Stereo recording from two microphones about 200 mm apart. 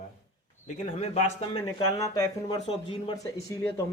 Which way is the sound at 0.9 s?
30° left (ahead or behind).